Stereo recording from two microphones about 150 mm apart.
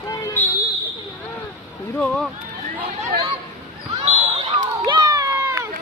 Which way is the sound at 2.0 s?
5° left (ahead or behind).